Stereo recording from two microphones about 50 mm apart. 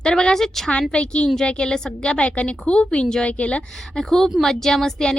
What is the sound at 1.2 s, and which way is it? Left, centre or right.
A woman's voice, centre.